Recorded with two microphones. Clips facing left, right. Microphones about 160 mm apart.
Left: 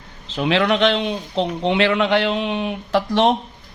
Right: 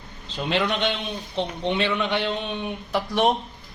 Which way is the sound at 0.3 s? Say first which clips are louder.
Left 6 dB; 90° left.